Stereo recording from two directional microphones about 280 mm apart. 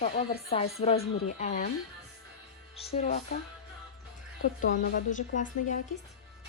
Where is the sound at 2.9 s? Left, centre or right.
Left.